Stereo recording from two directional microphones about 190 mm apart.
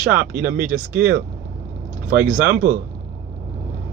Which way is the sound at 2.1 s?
55° right (ahead or behind).